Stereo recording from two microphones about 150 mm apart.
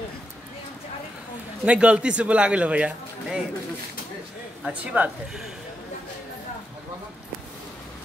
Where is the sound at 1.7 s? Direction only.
10° right (ahead or behind).